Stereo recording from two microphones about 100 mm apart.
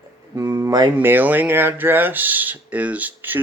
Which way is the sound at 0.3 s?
30° right (ahead or behind).